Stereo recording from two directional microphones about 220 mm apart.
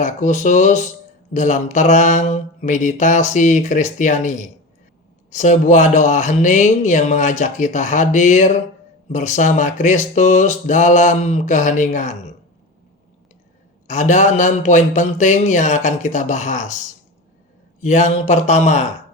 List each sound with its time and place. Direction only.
0.0 s speech: 35° left (ahead or behind)
13.8 s speech: 35° left (ahead or behind)